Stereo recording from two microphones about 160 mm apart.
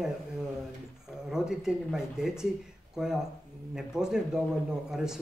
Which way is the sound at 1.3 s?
5° right (ahead or behind).